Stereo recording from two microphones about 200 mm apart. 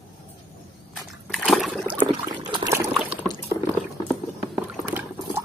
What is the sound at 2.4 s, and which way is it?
Trickle, 20° right (ahead or behind).